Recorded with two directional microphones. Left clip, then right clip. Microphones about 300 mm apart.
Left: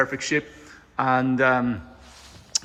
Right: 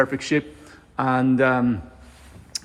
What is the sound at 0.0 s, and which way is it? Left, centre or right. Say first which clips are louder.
Speech: right 2 dB; centre.